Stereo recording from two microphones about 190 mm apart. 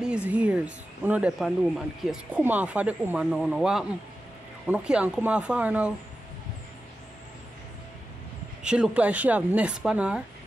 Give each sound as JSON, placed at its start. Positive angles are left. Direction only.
{"t": 0.0, "sound": "speech", "side_deg": -5}
{"t": 8.6, "sound": "speech", "side_deg": -5}